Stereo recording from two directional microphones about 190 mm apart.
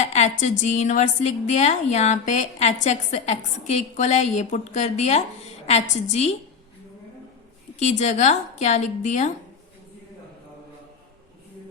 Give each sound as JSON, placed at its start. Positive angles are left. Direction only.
{"t": 0.0, "sound": "speech", "side_deg": 35}
{"t": 7.8, "sound": "speech", "side_deg": 35}